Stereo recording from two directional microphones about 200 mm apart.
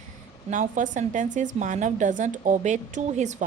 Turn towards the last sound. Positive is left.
turn(degrees=-35)  # may be behind; listen again after turning